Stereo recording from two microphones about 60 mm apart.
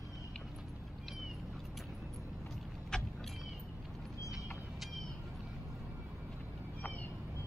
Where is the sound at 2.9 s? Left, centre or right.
Centre.